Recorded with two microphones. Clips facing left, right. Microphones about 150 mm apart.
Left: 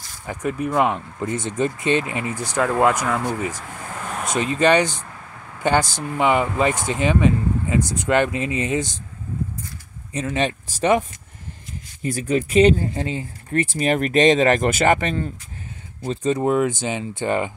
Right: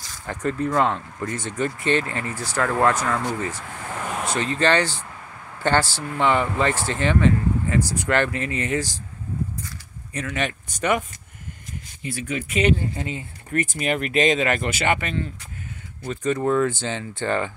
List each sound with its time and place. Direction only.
0.3 s speech: 10° left (ahead or behind)
10.1 s speech: 25° left (ahead or behind)
12.0 s speech: 40° left (ahead or behind)
16.0 s speech: 25° left (ahead or behind)